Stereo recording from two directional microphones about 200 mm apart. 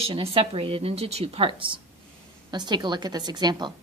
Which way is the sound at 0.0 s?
30° right (ahead or behind).